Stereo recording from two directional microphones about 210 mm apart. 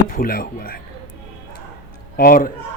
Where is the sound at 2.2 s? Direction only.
45° left (ahead or behind).